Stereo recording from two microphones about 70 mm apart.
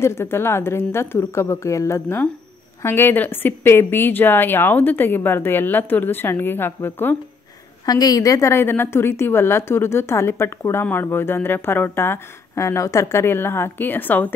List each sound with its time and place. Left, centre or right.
0.0 s a woman's voice: left
7.8 s a woman's voice: left